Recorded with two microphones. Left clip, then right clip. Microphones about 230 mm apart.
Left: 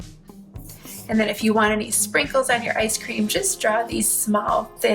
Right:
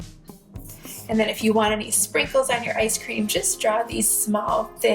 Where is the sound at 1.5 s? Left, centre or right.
Left.